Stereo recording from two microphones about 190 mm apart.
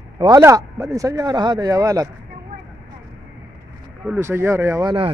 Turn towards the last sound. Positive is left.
turn(degrees=-25)  # may be behind; listen again after turning